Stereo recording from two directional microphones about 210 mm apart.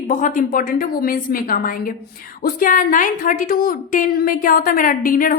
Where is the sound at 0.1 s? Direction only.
40° left (ahead or behind).